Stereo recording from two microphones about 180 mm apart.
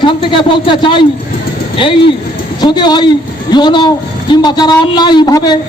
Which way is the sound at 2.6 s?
25° left (ahead or behind).